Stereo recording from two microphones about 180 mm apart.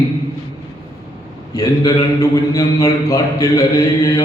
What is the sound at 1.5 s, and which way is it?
A man's voice, 20° left (ahead or behind).